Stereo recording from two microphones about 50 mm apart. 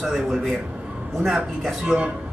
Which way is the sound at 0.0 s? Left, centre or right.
Centre.